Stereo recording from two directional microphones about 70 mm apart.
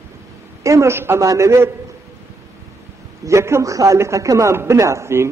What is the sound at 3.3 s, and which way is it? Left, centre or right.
A man's voice, right.